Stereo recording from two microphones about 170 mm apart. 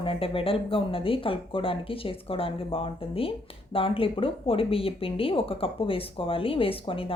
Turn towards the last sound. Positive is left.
turn(degrees=35)  # may be behind; listen again after turning